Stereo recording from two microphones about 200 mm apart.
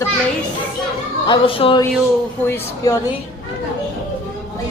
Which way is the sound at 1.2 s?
25° left (ahead or behind).